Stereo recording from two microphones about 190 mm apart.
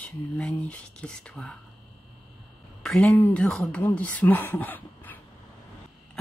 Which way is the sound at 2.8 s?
5° left (ahead or behind).